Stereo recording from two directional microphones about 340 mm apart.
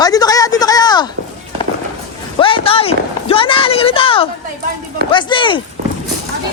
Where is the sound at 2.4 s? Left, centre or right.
Centre.